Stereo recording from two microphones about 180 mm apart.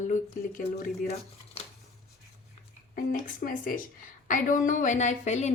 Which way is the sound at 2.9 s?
50° left (ahead or behind).